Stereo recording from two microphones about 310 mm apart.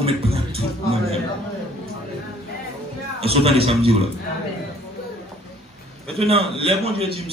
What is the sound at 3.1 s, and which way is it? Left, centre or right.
Speech, centre.